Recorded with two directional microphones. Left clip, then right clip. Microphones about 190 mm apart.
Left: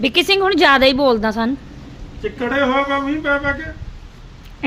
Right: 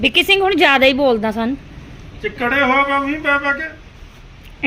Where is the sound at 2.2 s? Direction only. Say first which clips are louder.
Right 2 dB; 15° right (ahead or behind).